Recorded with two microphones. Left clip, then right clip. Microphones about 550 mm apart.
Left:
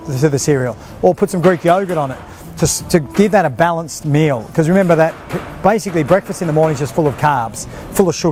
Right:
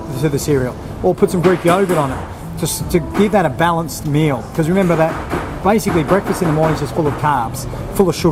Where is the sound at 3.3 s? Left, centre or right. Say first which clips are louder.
Left 1 dB; left.